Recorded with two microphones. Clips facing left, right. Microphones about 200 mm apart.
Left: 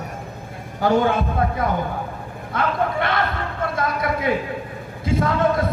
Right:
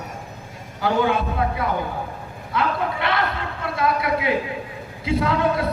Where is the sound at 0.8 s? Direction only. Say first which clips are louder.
Left 2 dB; 45° left (ahead or behind).